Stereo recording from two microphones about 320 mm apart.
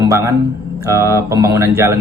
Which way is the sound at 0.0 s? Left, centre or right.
Centre.